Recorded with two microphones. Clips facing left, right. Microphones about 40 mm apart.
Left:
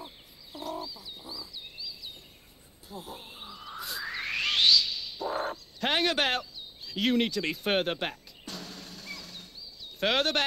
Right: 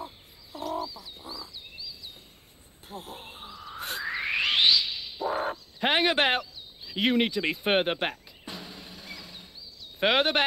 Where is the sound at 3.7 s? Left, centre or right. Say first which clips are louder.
Right 3 dB; right.